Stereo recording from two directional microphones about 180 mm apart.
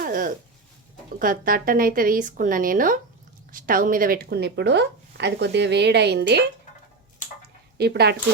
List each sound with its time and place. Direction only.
0.0 s a woman's voice: 50° right (ahead or behind); by 6.4 s 70° right (ahead or behind)
7.8 s speech: 65° right (ahead or behind)